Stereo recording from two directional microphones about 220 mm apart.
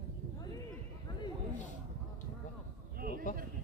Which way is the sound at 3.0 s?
40° right (ahead or behind).